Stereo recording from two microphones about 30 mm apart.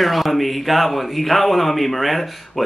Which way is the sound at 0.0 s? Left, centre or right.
Centre.